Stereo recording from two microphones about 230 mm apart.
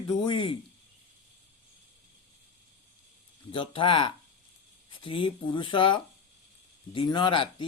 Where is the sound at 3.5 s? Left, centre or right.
Left.